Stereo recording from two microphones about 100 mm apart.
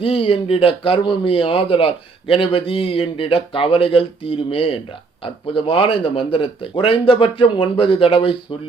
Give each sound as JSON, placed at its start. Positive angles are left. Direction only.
{"t": 0.0, "sound": "speech", "side_deg": 65}